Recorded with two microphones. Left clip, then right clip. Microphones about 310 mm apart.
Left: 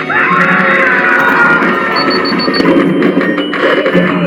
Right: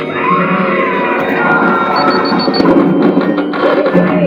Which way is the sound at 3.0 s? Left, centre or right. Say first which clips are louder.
Even; left.